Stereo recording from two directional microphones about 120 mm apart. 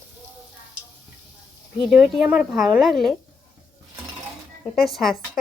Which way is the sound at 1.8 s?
5° right (ahead or behind).